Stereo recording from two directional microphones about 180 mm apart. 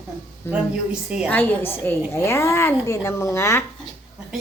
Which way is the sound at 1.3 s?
10° left (ahead or behind).